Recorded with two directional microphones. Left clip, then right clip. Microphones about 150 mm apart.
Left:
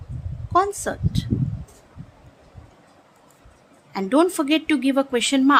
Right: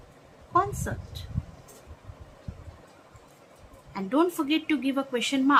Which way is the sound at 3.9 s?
90° left.